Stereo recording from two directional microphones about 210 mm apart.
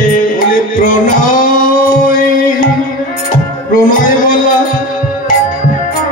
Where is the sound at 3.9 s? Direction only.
40° left (ahead or behind).